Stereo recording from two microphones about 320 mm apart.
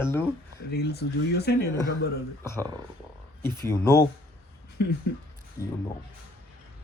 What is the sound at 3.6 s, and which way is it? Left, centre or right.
Speech, centre.